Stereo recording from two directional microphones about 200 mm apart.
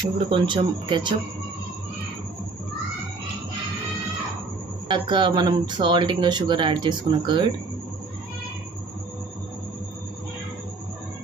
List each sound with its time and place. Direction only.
0.3 s speech: 25° right (ahead or behind)
4.8 s speech: 25° right (ahead or behind)